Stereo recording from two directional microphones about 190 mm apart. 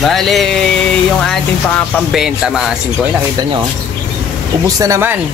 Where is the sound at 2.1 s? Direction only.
5° right (ahead or behind).